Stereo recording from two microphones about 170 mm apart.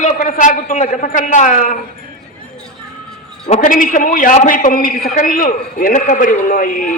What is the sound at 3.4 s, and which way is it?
A man's voice, 40° left (ahead or behind).